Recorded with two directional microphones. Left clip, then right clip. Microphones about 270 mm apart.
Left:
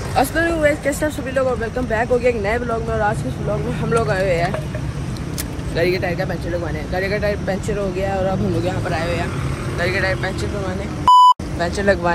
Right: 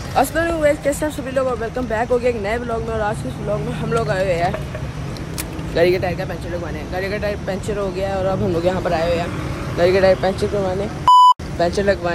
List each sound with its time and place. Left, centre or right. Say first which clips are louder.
0.1 s speech: even; centre
5.8 s speech: right 3 dB; right
7.0 s speech: left 2 dB; centre
8.6 s speech: right 4 dB; centre
11.1 s beep: even; centre